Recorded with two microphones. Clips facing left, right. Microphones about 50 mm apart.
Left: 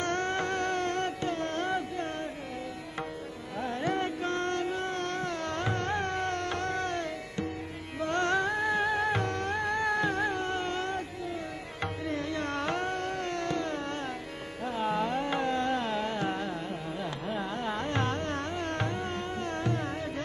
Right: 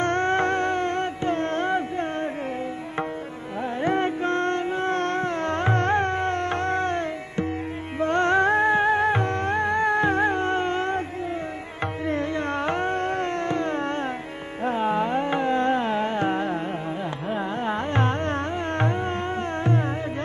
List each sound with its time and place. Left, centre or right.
0.0 s music: right
1.3 s a sound: right
3.6 s music: right
8.4 s music: right
12.1 s carnatic music: right
14.6 s music: right
14.9 s carnatic music: right
19.6 s music: right